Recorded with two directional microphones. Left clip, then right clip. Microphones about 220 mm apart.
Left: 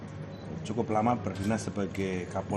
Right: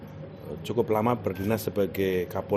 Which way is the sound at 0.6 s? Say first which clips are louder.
Right 4 dB; 45° right (ahead or behind).